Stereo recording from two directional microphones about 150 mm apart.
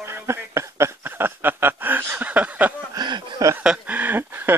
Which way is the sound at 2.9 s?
30° right (ahead or behind).